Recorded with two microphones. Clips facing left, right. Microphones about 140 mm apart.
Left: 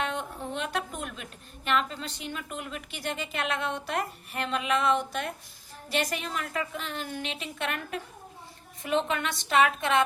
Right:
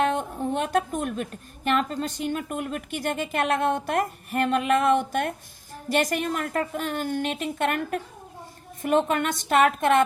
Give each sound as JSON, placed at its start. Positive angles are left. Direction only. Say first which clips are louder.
{"t": 0.0, "sound": "a woman's voice", "louder": "right 8 dB", "side_deg": -45}